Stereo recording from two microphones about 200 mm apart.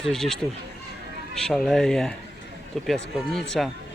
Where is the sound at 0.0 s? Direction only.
Centre (ahead or behind).